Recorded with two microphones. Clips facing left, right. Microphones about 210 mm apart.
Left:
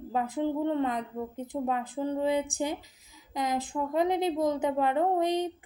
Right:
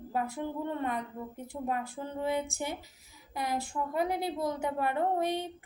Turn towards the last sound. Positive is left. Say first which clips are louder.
# left 4 dB
turn(degrees=20)  # may be behind; listen again after turning